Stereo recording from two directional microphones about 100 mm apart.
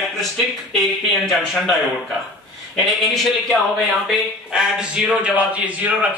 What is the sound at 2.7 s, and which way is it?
A man's voice, centre (ahead or behind).